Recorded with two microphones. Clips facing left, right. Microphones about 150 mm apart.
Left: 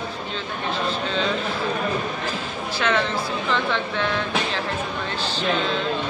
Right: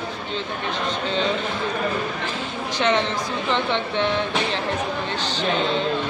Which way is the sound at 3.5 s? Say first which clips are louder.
Right 2 dB; 20° right (ahead or behind).